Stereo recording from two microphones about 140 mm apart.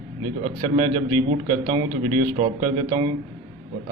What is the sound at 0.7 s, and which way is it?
Speech, 30° right (ahead or behind).